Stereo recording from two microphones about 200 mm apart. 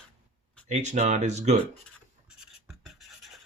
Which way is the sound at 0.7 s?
35° right (ahead or behind).